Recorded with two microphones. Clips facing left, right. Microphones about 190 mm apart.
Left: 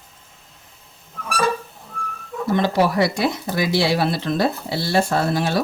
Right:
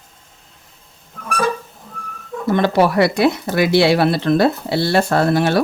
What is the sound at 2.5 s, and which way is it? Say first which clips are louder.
Speech: right 4 dB; 60° right (ahead or behind).